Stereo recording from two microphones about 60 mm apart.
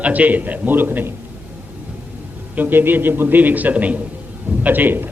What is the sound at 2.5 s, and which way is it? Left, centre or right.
A man's voice, right.